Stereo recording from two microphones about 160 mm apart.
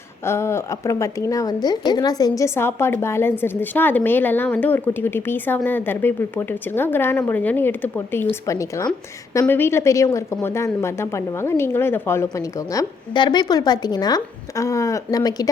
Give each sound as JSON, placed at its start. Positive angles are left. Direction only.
{"t": 0.3, "sound": "a woman's voice", "side_deg": 15}